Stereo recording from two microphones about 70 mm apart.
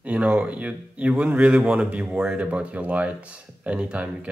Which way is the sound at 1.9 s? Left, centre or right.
Centre.